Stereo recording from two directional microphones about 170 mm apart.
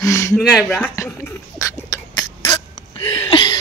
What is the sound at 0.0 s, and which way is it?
Speech, 20° left (ahead or behind).